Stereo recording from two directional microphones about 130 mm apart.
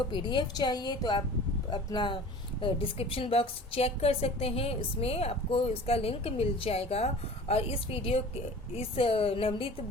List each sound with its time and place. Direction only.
0.1 s a woman's voice: 40° left (ahead or behind)